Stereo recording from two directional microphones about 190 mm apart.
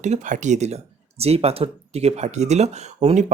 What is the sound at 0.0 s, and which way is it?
Speech, 40° right (ahead or behind).